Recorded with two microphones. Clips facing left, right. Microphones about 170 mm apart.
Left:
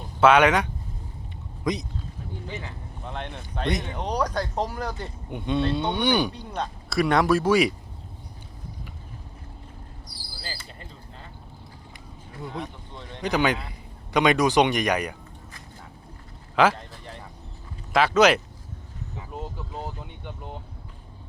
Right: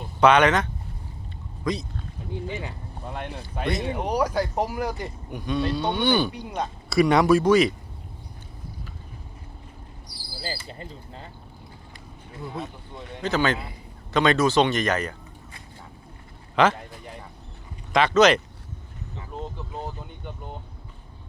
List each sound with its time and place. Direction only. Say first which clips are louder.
0.2 s speech: even; 5° left (ahead or behind)
2.6 s speech: right 3 dB; 10° right (ahead or behind)
5.3 s speech: left 1 dB; 25° left (ahead or behind)
6.3 s speech: right 1 dB; 10° right (ahead or behind)
6.9 s speech: right 3 dB; centre (ahead or behind)
13.2 s speech: even; 15° left (ahead or behind)
16.6 s speech: even; 5° left (ahead or behind)
17.9 s speech: right 1 dB; 5° left (ahead or behind)
19.3 s vehicle: right 1 dB; centre (ahead or behind)